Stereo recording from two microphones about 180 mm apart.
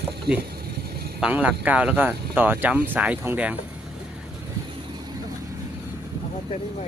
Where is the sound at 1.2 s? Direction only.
5° right (ahead or behind).